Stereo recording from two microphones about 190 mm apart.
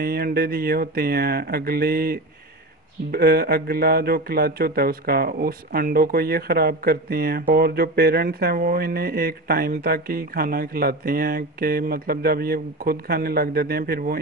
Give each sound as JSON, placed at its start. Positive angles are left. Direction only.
{"t": 0.0, "sound": "speech", "side_deg": -55}